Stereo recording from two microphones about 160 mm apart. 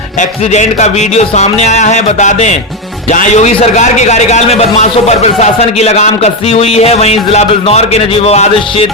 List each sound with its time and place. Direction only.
0.2 s a man's voice: 50° left (ahead or behind)